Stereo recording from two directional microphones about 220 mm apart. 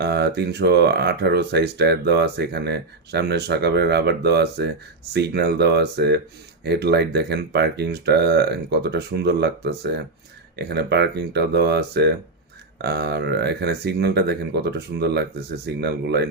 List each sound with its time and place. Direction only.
0.0 s speech: 50° right (ahead or behind)